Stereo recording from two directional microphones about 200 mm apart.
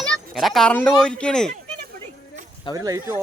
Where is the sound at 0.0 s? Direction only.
Centre (ahead or behind).